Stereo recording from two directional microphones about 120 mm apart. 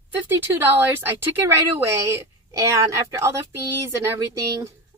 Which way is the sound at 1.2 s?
20° right (ahead or behind).